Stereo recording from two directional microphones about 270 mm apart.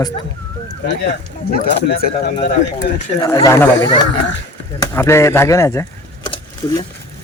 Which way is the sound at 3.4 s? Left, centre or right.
Centre.